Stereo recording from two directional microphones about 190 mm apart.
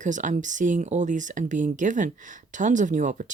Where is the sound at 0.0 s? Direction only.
40° right (ahead or behind).